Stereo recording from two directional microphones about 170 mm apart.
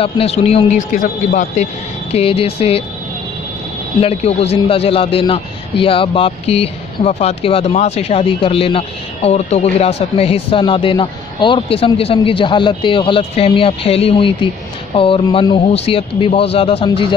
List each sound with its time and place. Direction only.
0.0 s a man's voice: 35° left (ahead or behind)
2.1 s a man's voice: 35° left (ahead or behind)
4.0 s a man's voice: 35° left (ahead or behind)